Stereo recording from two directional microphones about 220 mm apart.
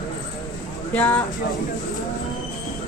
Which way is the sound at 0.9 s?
5° left (ahead or behind).